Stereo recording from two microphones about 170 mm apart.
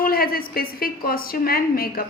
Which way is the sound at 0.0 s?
60° left (ahead or behind).